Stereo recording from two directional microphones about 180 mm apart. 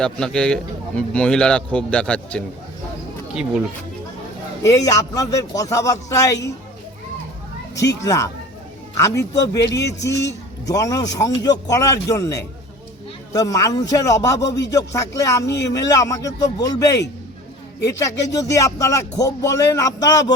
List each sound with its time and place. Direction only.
0.0 s a man's voice: 5° left (ahead or behind)
4.6 s a man's voice: 20° left (ahead or behind)
7.8 s a man's voice: 20° left (ahead or behind)